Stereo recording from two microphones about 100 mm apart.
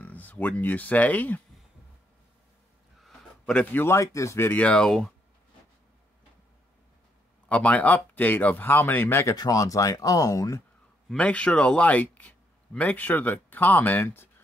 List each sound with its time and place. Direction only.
0.0 s speech: 15° left (ahead or behind)
3.0 s a sound: 5° left (ahead or behind)
3.7 s speech: 25° left (ahead or behind)
4.5 s speech: 15° left (ahead or behind)
7.4 s speech: 15° left (ahead or behind)
9.3 s speech: 35° left (ahead or behind)
11.1 s speech: 10° left (ahead or behind)